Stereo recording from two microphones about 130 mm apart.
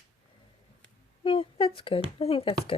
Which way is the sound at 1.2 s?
40° left (ahead or behind).